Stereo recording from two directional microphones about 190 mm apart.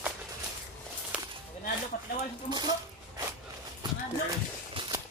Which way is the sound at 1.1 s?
5° right (ahead or behind).